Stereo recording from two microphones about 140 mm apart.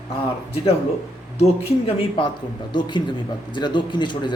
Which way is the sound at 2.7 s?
30° left (ahead or behind).